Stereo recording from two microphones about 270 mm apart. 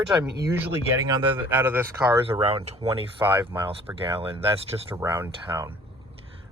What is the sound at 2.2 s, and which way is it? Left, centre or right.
Speech, centre.